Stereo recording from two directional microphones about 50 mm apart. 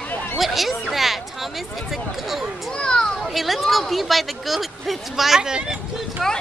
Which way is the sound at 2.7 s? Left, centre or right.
Centre.